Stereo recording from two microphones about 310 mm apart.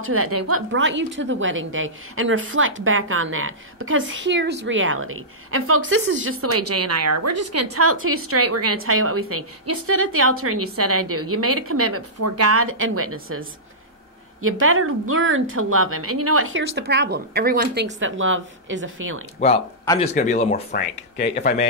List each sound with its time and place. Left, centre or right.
0.0 s a woman's voice: right
7.7 s a woman's voice: right
14.4 s a woman's voice: right
19.8 s speech: centre
20.2 s speech: left